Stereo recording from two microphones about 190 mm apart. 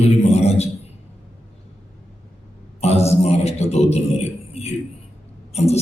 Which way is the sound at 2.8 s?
35° left (ahead or behind).